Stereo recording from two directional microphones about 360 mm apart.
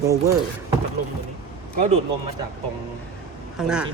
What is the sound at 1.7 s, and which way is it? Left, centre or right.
Speech, centre.